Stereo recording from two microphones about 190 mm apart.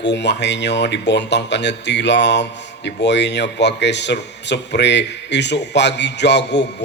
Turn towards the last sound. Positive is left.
turn(degrees=65)  # may be behind; listen again after turning